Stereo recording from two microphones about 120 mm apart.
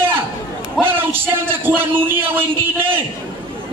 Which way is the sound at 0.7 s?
20° right (ahead or behind).